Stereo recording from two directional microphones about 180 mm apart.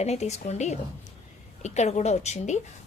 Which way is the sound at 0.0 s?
35° left (ahead or behind).